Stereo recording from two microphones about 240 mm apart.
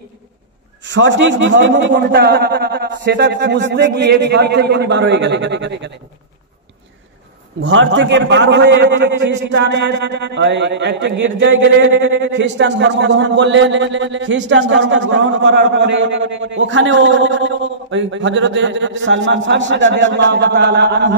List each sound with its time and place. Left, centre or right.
0.8 s a man's voice: right
7.6 s a man's voice: right